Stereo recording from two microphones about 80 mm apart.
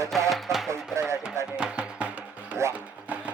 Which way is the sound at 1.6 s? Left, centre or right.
Centre.